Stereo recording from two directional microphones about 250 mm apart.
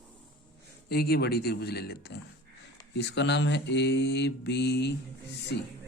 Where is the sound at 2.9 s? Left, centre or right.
Left.